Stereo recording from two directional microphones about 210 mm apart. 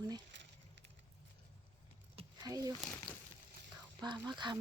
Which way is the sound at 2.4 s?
15° right (ahead or behind).